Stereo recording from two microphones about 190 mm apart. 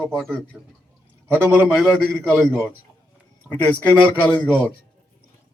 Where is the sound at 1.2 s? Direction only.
10° right (ahead or behind).